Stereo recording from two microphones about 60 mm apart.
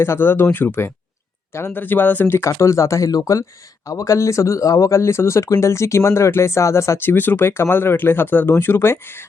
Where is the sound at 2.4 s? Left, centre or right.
Left.